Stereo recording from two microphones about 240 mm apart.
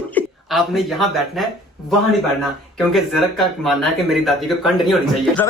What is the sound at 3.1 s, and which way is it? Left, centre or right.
Speech, centre.